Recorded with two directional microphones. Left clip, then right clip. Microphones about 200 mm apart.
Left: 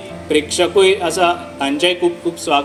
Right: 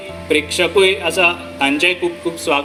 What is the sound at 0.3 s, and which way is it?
Speech, 60° left (ahead or behind).